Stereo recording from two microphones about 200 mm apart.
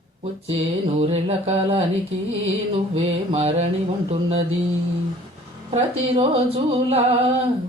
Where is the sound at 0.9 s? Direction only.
30° right (ahead or behind).